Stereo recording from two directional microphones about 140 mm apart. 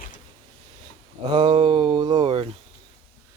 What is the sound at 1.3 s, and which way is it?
Speech, 35° right (ahead or behind).